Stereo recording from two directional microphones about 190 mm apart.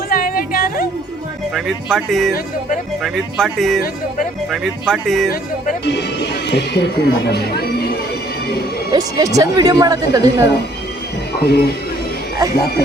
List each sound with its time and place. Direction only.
0.1 s music: 50° left (ahead or behind)
1.5 s speech: centre (ahead or behind)
5.3 s speech: 55° left (ahead or behind)
8.9 s speech: 20° right (ahead or behind)
11.4 s speech: 55° left (ahead or behind)